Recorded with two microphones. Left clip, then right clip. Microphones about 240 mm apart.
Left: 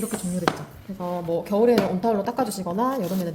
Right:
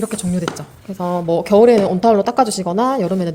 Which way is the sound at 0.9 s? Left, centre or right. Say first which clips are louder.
Right 8 dB; right.